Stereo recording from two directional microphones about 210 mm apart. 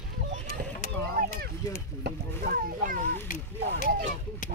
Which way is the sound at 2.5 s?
40° right (ahead or behind).